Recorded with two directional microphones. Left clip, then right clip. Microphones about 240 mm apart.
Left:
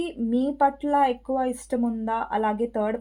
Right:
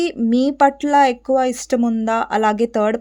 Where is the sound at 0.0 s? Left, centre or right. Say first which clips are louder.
Right 8 dB; right.